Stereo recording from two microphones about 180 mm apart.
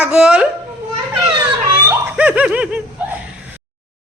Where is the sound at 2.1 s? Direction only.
10° right (ahead or behind).